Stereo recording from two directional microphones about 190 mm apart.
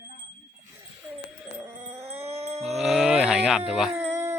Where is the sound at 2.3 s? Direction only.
35° right (ahead or behind).